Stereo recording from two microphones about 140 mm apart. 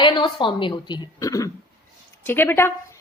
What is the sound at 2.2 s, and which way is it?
Speech, 15° left (ahead or behind).